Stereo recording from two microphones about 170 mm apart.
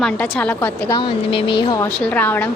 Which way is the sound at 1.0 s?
30° left (ahead or behind).